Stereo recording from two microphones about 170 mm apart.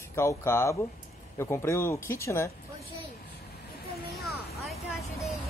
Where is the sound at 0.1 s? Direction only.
15° left (ahead or behind).